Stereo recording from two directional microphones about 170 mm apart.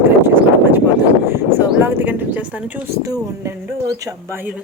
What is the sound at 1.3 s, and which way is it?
A woman's voice, 10° right (ahead or behind).